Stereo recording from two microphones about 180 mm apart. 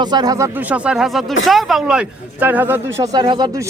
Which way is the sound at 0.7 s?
5° right (ahead or behind).